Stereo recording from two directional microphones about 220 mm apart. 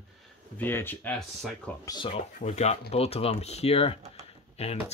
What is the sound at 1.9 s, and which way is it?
Speech, 25° left (ahead or behind).